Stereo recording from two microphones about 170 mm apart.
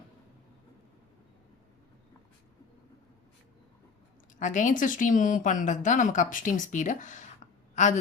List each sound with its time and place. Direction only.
4.4 s a woman's voice: 50° left (ahead or behind)